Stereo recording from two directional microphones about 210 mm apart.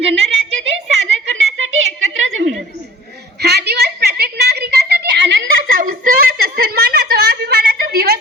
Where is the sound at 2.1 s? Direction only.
70° right (ahead or behind).